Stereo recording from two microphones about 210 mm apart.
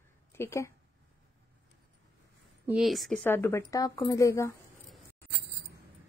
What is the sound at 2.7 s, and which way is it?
Speech, centre (ahead or behind).